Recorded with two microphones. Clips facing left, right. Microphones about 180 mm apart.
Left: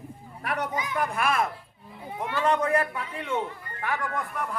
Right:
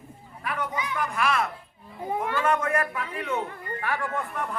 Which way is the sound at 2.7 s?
25° left (ahead or behind).